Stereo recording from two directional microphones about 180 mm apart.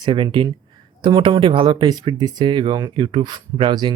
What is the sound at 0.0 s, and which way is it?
Speech, 30° right (ahead or behind).